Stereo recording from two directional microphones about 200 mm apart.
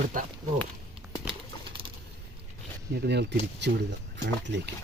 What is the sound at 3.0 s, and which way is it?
Speech, 60° right (ahead or behind).